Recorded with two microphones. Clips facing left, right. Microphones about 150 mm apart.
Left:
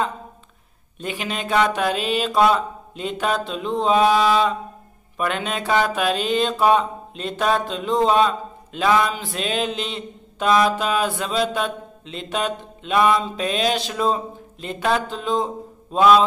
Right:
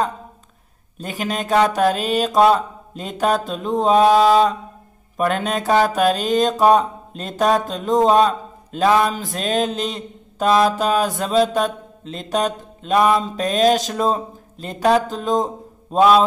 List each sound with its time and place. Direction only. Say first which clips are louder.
0.9 s mantra: right 3 dB; 40° right (ahead or behind)